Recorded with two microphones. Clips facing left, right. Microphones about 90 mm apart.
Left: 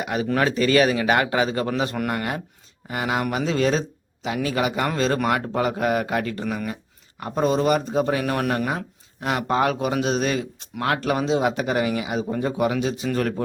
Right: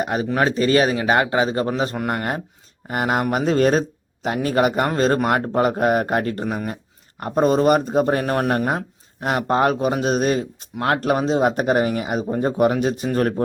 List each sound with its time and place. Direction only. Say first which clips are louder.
0.0 s a man's voice: right 2 dB; 40° right (ahead or behind)
2.8 s a man's voice: right 4 dB; 45° right (ahead or behind)